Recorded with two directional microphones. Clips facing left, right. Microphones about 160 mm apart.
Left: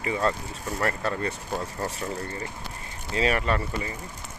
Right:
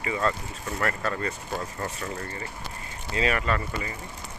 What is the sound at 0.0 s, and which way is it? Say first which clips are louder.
Speech: left 1 dB; 30° left (ahead or behind).